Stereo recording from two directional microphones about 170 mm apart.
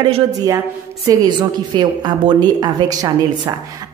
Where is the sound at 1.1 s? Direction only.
20° right (ahead or behind).